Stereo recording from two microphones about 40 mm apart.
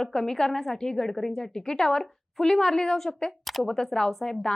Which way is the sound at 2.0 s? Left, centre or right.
Centre.